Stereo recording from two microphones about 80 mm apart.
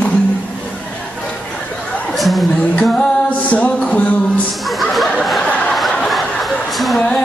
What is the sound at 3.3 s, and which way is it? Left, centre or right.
Music, centre.